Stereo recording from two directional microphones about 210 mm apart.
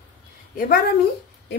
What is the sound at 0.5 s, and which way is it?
Speech, 45° left (ahead or behind).